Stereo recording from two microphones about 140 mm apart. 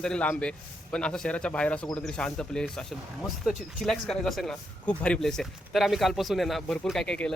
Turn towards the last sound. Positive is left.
turn(degrees=5)  # may be behind; listen again after turning